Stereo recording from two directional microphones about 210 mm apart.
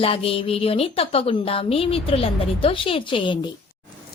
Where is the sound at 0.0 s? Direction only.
25° left (ahead or behind).